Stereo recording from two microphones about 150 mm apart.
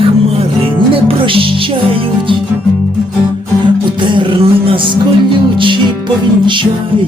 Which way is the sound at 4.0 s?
35° right (ahead or behind).